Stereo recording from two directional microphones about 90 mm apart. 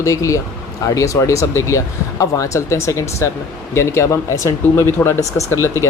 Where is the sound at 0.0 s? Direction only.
35° left (ahead or behind).